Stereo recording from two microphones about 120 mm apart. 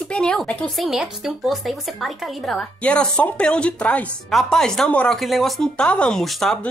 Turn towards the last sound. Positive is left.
turn(degrees=0)  # may be behind; listen again after turning